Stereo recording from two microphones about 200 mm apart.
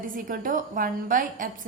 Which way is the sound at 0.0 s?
45° right (ahead or behind).